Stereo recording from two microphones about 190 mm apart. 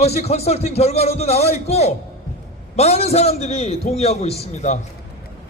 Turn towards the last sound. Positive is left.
turn(degrees=35)  # may be behind; listen again after turning